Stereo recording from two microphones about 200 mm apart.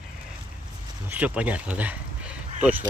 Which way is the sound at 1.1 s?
5° right (ahead or behind).